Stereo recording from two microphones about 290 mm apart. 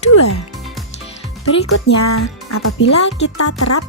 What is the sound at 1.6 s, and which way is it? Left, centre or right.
Speech, left.